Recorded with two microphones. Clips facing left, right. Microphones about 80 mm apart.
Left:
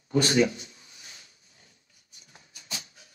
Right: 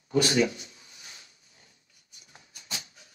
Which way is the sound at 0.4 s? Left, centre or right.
Left.